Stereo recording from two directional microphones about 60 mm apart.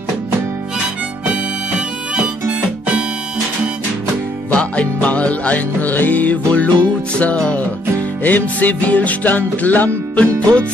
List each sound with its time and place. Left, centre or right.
1.3 s harmonica: centre
4.5 s music: left